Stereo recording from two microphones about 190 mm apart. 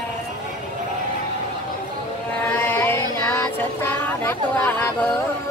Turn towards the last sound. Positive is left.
turn(degrees=10)  # may be behind; listen again after turning